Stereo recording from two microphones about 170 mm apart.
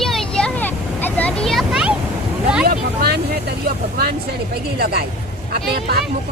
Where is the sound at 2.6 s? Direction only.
65° right (ahead or behind).